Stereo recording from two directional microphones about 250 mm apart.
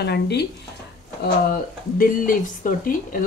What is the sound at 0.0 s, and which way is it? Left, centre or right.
A woman's voice, left.